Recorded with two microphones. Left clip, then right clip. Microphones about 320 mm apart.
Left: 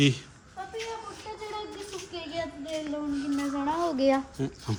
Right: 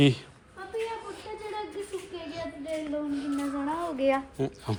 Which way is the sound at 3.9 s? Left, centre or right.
Left.